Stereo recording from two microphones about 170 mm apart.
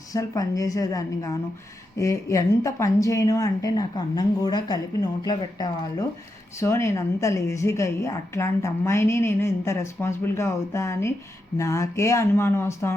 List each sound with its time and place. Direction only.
0.1 s a woman's voice: 20° left (ahead or behind)